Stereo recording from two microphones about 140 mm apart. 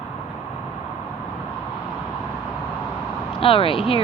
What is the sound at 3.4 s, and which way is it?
Speech, 40° left (ahead or behind).